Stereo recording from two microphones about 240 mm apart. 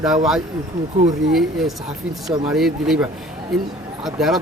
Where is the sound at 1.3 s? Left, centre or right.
Centre.